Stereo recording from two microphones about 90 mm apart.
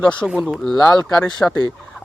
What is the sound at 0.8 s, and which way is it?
Speech, 45° left (ahead or behind).